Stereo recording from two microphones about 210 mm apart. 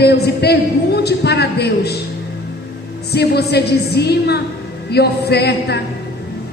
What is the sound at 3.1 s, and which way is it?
A man's voice, 50° left (ahead or behind).